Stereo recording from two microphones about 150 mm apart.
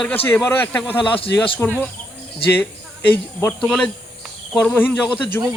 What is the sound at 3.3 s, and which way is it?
Speech, 10° left (ahead or behind).